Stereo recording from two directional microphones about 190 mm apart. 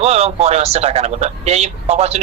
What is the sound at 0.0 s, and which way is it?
Speech, 35° right (ahead or behind).